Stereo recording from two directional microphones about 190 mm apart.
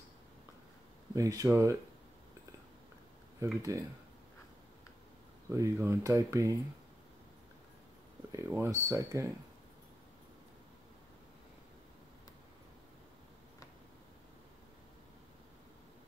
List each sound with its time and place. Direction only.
1.1 s speech: 15° right (ahead or behind)
3.4 s speech: 15° right (ahead or behind)
5.5 s speech: 15° right (ahead or behind)
8.3 s speech: 15° right (ahead or behind)